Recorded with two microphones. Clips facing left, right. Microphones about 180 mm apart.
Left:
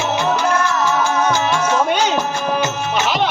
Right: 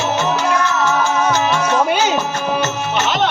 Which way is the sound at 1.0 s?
10° right (ahead or behind).